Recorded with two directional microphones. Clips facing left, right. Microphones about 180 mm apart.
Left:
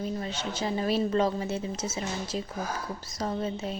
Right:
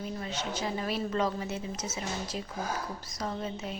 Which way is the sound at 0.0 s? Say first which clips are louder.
Left 3 dB; 30° left (ahead or behind).